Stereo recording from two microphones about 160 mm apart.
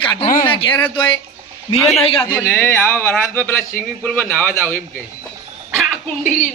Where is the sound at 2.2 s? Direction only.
15° left (ahead or behind).